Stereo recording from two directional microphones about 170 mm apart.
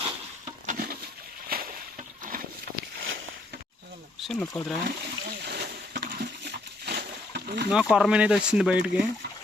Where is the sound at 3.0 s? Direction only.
75° right (ahead or behind).